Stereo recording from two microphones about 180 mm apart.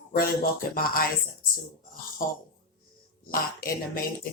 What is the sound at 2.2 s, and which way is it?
Speech, 50° left (ahead or behind).